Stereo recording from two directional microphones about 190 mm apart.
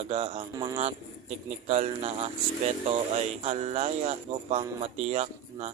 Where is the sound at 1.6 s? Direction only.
35° right (ahead or behind).